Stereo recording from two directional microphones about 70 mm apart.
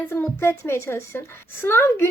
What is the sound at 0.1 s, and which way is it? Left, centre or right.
A woman's voice, left.